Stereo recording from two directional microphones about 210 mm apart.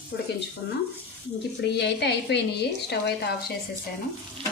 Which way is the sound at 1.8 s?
55° left (ahead or behind).